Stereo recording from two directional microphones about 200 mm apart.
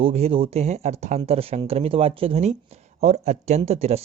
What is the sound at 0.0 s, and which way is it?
Speech, 30° right (ahead or behind).